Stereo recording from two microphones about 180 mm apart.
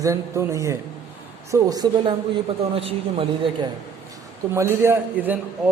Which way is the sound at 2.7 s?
30° right (ahead or behind).